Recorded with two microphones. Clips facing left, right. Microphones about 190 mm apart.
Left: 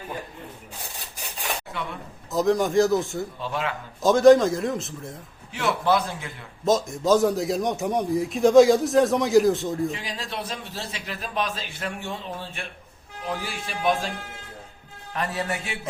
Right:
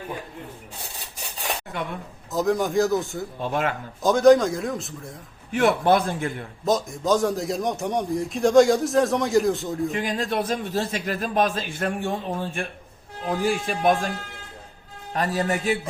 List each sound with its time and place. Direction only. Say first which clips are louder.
1.7 s a man's voice: right 3 dB; 45° right (ahead or behind)
2.3 s a man's voice: left 1 dB; centre (ahead or behind)
3.4 s a man's voice: right 6 dB; 50° right (ahead or behind)
4.0 s a man's voice: left 1 dB; centre (ahead or behind)
5.5 s a man's voice: right 4 dB; 55° right (ahead or behind)
6.7 s a man's voice: left 2 dB; centre (ahead or behind)
10.0 s a man's voice: right 8 dB; 50° right (ahead or behind)
15.1 s a man's voice: right 4 dB; 35° right (ahead or behind)